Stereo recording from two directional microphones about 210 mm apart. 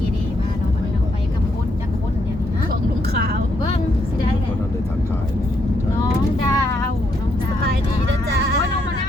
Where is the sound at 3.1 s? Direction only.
50° right (ahead or behind).